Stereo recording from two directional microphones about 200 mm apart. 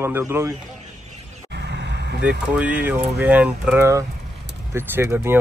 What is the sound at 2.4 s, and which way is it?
Speech, 5° right (ahead or behind).